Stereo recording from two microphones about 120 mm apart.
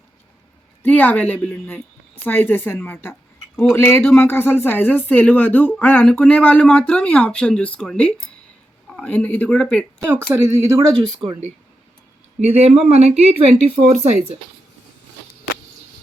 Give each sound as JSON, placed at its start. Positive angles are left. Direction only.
{"t": 0.8, "sound": "speech", "side_deg": 15}
{"t": 10.0, "sound": "speech", "side_deg": -20}
{"t": 12.4, "sound": "speech", "side_deg": -60}